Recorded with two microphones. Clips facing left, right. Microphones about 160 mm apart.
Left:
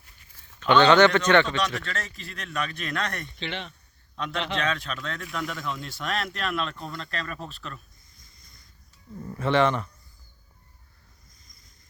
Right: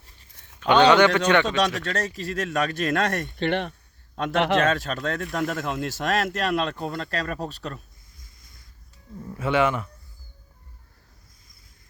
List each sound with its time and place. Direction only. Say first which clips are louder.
0.6 s a man's voice: right 1 dB; 15° right (ahead or behind)
1.9 s speech: right 8 dB; 40° right (ahead or behind)
8.1 s a sound: right 2 dB; centre (ahead or behind)
9.4 s a man's voice: even; 5° right (ahead or behind)
11.4 s boat: right 1 dB; 5° right (ahead or behind)